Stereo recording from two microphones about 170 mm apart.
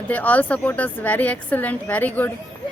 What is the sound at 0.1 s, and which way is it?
Speech, 10° left (ahead or behind).